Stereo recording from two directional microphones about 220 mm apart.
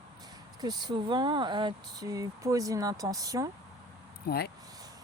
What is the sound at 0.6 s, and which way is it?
Speech, 20° right (ahead or behind).